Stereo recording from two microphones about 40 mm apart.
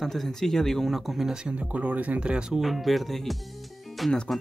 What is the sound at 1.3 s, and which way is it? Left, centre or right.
Speech, right.